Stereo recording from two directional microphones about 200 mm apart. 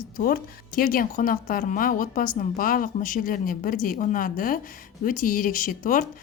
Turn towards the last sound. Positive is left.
turn(degrees=40)  # may be behind; listen again after turning